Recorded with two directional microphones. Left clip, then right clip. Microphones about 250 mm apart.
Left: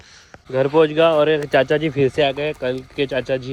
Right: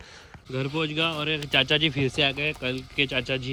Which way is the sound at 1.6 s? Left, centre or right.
Centre.